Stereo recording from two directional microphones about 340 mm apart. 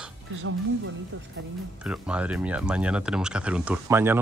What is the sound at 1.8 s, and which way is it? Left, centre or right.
Speech, centre.